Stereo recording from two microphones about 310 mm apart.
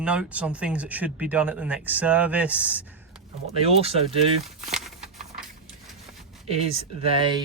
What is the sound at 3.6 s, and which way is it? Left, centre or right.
Speech, centre.